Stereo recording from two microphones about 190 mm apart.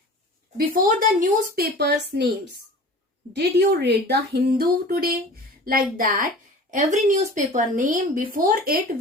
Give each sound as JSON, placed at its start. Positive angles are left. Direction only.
{"t": 0.5, "sound": "a woman's voice", "side_deg": -45}